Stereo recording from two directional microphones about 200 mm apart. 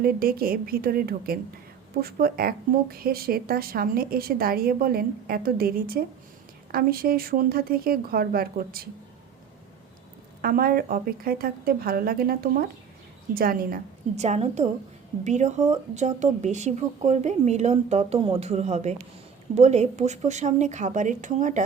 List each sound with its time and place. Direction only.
0.0 s a woman's voice: 45° right (ahead or behind)
10.4 s a woman's voice: 45° right (ahead or behind)